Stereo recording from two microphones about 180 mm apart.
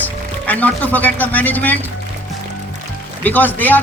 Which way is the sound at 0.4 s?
10° left (ahead or behind).